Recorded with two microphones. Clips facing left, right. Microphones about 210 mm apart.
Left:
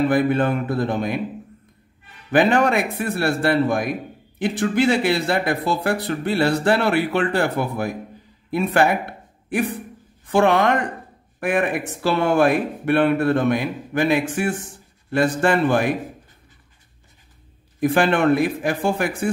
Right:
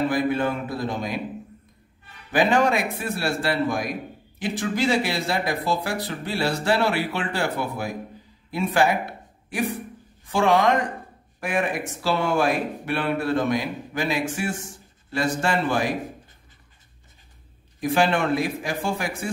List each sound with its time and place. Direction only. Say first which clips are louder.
0.1 s speech: left 4 dB; 60° left (ahead or behind)
2.3 s speech: left 3 dB; 60° left (ahead or behind)
10.2 s a woman's voice: left 3 dB; 60° left (ahead or behind)
17.7 s speech: left 4 dB; 55° left (ahead or behind)